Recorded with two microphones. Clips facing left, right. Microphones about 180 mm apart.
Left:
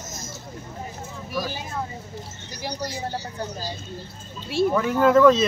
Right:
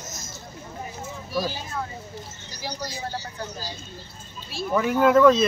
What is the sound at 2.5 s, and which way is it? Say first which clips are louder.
Speech: left 3 dB; 60° left (ahead or behind).